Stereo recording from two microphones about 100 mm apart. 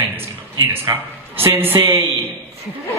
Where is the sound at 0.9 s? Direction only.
40° right (ahead or behind).